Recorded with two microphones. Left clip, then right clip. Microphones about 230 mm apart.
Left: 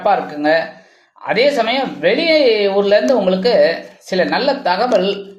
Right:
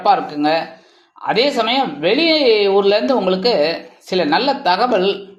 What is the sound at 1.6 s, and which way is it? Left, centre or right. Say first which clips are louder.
A woman's voice: even; right.